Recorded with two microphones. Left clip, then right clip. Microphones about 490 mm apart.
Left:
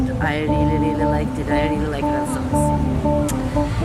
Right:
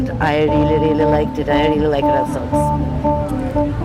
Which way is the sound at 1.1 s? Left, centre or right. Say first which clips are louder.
Right 5 dB; right.